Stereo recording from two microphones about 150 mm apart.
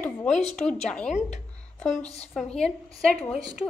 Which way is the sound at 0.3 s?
50° left (ahead or behind).